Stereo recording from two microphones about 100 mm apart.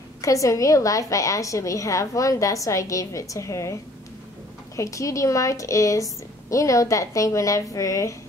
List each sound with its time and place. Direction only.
0.2 s a woman's voice: 35° left (ahead or behind)
4.7 s a woman's voice: 30° left (ahead or behind)